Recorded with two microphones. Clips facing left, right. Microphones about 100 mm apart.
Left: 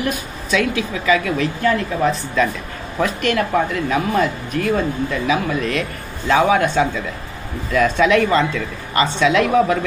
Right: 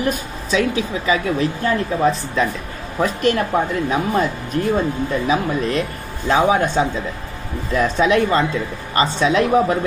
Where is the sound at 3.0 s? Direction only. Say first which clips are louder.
Right 1 dB; 35° right (ahead or behind).